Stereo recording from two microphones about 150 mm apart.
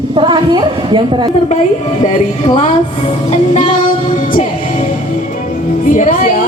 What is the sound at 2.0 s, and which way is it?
Speech, 45° left (ahead or behind).